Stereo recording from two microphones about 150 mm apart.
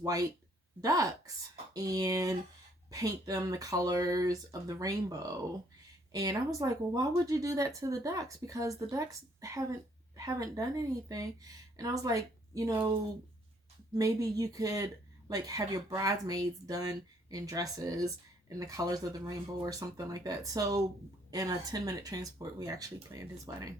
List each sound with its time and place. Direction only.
0.0 s speech: 25° right (ahead or behind)
13.9 s speech: 25° right (ahead or behind)